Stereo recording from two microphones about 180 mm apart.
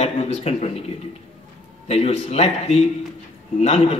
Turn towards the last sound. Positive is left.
turn(degrees=35)  # may be behind; listen again after turning